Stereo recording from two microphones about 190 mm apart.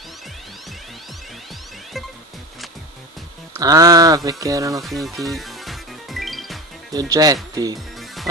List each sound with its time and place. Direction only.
3.5 s speech: 20° right (ahead or behind)
4.8 s music: centre (ahead or behind)
6.9 s speech: 20° right (ahead or behind)